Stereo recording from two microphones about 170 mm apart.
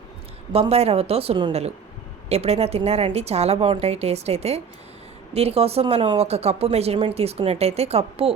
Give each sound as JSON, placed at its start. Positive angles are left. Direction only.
{"t": 0.5, "sound": "speech", "side_deg": -35}